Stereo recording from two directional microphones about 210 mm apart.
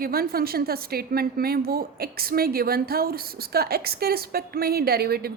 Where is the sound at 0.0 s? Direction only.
45° right (ahead or behind).